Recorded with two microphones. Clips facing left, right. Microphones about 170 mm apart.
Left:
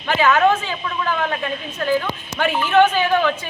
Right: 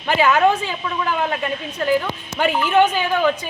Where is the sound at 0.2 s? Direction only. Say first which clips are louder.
Even; 15° right (ahead or behind).